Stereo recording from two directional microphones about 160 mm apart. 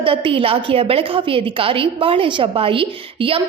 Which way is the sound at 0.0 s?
35° right (ahead or behind).